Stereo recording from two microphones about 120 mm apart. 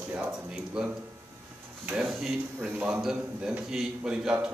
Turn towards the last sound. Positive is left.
turn(degrees=-5)  # may be behind; listen again after turning